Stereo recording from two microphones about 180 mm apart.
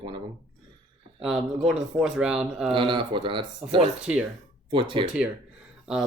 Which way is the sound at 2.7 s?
30° right (ahead or behind).